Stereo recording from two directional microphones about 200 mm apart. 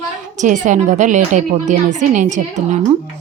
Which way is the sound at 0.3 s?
40° right (ahead or behind).